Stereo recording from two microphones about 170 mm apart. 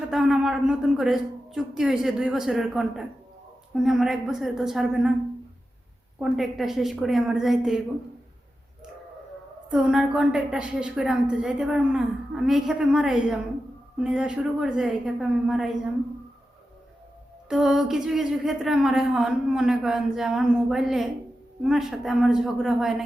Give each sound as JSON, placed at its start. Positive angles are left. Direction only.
{"t": 0.1, "sound": "a woman's voice", "side_deg": 0}
{"t": 6.1, "sound": "a woman's voice", "side_deg": -5}
{"t": 9.6, "sound": "a woman's voice", "side_deg": -5}
{"t": 17.5, "sound": "a woman's voice", "side_deg": 0}